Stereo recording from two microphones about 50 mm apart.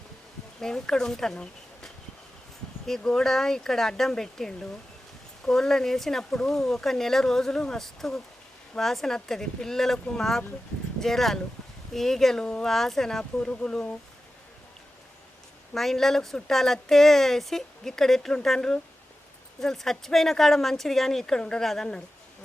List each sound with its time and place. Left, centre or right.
0.6 s speech: centre
15.7 s a woman's voice: centre